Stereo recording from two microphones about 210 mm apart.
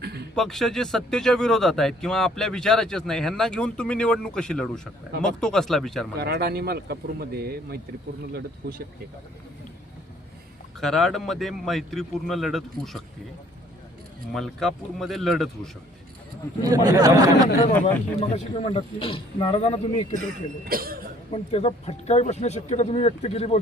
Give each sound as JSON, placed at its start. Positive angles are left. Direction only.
{"t": 0.0, "sound": "a sound", "side_deg": -50}
{"t": 0.3, "sound": "speech", "side_deg": 0}
{"t": 6.1, "sound": "speech", "side_deg": -50}
{"t": 10.8, "sound": "speech", "side_deg": 0}
{"t": 14.3, "sound": "speech", "side_deg": 0}
{"t": 16.6, "sound": "speech", "side_deg": -15}
{"t": 18.2, "sound": "speech", "side_deg": 30}
{"t": 20.7, "sound": "speech", "side_deg": -45}
{"t": 21.2, "sound": "speech", "side_deg": 30}